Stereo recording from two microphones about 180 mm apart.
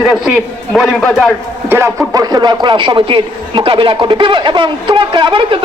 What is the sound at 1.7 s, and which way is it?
Speech, 15° right (ahead or behind).